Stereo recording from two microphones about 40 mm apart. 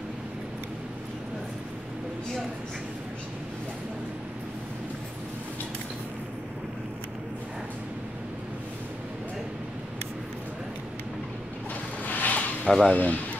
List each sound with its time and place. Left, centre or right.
12.0 s a sound: left
12.6 s speech: centre
12.9 s speech: left